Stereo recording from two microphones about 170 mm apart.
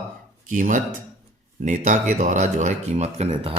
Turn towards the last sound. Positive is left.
turn(degrees=-35)  # may be behind; listen again after turning